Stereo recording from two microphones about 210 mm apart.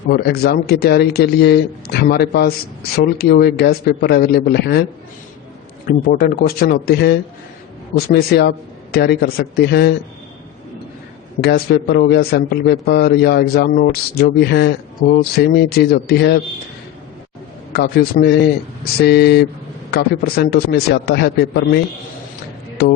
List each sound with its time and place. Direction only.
0.1 s a man's voice: 50° left (ahead or behind)
6.1 s a man's voice: 45° left (ahead or behind)
11.3 s a man's voice: 50° left (ahead or behind)
17.7 s a man's voice: 50° left (ahead or behind)